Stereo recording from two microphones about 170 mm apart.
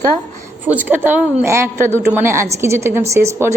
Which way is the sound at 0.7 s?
10° right (ahead or behind).